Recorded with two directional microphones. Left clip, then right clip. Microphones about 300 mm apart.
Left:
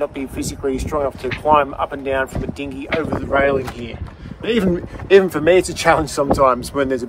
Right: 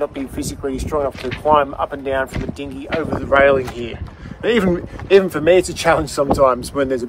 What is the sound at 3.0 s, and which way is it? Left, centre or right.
Speech, right.